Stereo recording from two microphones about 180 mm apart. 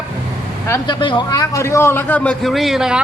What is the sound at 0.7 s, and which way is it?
A man's voice, 25° left (ahead or behind).